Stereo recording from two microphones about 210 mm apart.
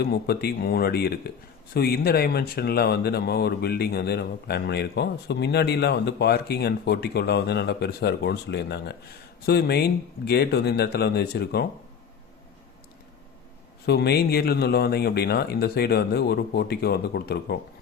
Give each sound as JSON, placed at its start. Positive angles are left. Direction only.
{"t": 0.0, "sound": "speech", "side_deg": 50}
{"t": 13.8, "sound": "speech", "side_deg": 50}